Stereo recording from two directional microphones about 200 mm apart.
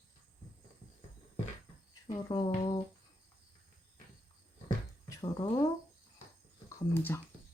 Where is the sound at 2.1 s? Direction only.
20° left (ahead or behind).